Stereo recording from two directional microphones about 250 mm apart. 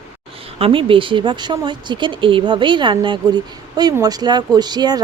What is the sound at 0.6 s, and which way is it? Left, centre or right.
Speech, right.